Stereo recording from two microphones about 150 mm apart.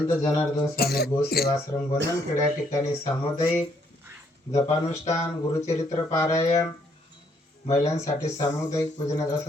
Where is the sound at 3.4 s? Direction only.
20° left (ahead or behind).